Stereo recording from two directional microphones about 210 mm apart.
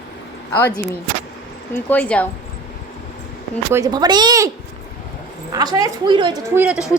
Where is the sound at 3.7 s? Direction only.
15° right (ahead or behind).